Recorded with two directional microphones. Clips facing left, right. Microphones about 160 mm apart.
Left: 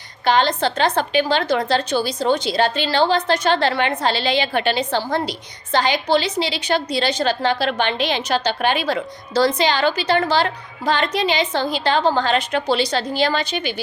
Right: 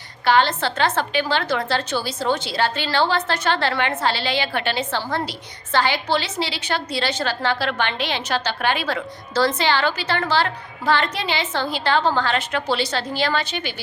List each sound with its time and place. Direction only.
0.3 s a woman's voice: 15° left (ahead or behind)